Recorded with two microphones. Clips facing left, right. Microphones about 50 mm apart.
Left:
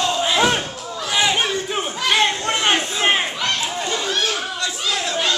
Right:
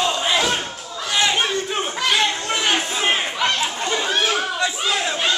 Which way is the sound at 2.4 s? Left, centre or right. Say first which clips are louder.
Left 2 dB; left.